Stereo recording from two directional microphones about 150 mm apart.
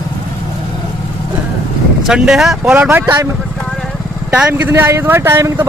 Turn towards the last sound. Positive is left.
turn(degrees=-15)  # may be behind; listen again after turning